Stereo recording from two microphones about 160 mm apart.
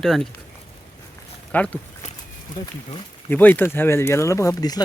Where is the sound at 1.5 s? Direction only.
10° left (ahead or behind).